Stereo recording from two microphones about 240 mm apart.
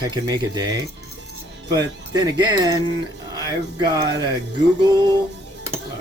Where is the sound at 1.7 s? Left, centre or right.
Centre.